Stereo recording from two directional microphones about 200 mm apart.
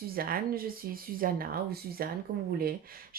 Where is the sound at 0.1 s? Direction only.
45° right (ahead or behind).